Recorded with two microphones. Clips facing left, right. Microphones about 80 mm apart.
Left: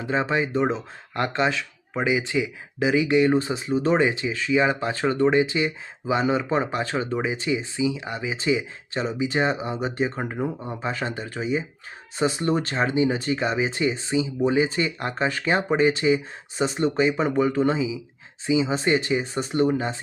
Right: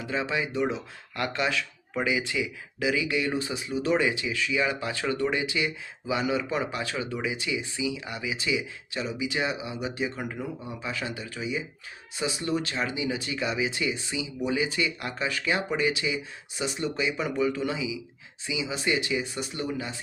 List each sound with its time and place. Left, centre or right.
0.0 s speech: left